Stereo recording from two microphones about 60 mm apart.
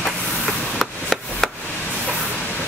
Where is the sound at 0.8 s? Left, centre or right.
Centre.